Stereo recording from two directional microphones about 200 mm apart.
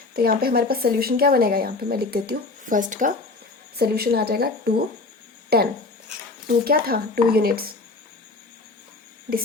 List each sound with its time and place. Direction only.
0.1 s speech: 50° right (ahead or behind)
3.8 s speech: 50° right (ahead or behind)